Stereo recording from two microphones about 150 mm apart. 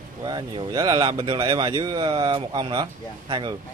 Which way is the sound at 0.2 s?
30° right (ahead or behind).